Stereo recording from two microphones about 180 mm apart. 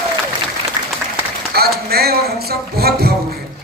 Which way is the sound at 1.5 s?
60° right (ahead or behind).